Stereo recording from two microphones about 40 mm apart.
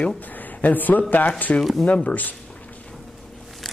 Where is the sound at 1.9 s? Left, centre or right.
Left.